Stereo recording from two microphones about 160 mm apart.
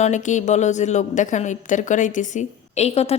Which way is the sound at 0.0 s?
50° left (ahead or behind).